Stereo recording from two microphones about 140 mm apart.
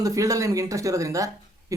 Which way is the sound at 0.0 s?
25° right (ahead or behind).